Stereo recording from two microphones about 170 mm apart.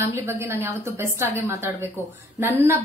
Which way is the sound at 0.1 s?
15° right (ahead or behind).